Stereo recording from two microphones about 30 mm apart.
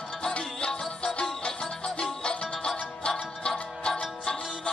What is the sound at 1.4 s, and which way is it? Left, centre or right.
Music, left.